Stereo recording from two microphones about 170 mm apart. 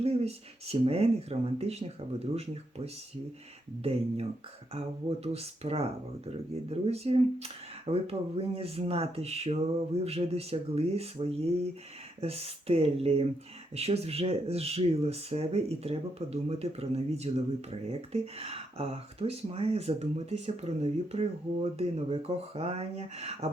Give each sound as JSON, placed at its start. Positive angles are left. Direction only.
{"t": 0.0, "sound": "speech", "side_deg": -35}
{"t": 4.7, "sound": "speech", "side_deg": -35}